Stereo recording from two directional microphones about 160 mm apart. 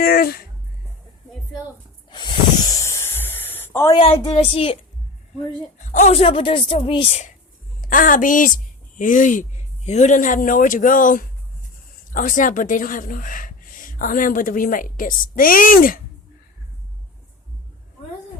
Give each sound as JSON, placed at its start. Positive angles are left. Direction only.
{"t": 0.0, "sound": "a sound", "side_deg": 70}
{"t": 2.0, "sound": "snake", "side_deg": 30}
{"t": 4.2, "sound": "a woman's voice", "side_deg": 40}
{"t": 5.8, "sound": "a woman's voice", "side_deg": 50}
{"t": 7.8, "sound": "speech", "side_deg": 60}